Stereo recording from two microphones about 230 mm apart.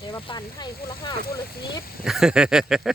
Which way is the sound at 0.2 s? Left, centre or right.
Left.